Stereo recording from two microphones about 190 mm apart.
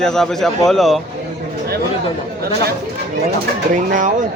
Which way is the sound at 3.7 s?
40° right (ahead or behind).